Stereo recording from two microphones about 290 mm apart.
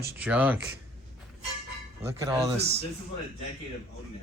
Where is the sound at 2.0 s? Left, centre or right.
Centre.